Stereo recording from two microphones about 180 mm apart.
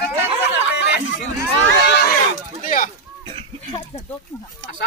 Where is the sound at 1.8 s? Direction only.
65° left (ahead or behind).